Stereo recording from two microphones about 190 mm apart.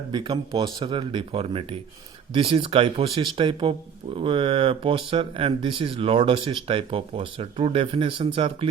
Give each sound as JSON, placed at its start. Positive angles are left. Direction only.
{"t": 0.1, "sound": "speech", "side_deg": -25}